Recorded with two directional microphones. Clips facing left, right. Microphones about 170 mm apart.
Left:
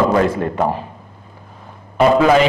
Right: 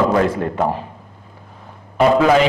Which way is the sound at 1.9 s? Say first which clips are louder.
Left 1 dB; 15° left (ahead or behind).